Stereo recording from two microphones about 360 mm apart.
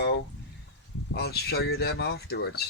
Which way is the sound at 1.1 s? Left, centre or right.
Left.